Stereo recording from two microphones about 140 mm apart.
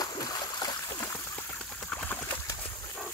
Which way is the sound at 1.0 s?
20° left (ahead or behind).